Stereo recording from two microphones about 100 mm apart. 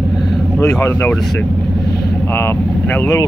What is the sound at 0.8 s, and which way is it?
Speech, 25° left (ahead or behind).